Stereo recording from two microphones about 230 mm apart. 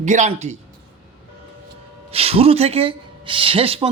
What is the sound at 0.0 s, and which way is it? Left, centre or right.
Speech, right.